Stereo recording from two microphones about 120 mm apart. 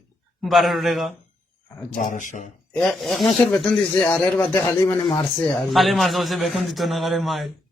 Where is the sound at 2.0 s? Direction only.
90° left.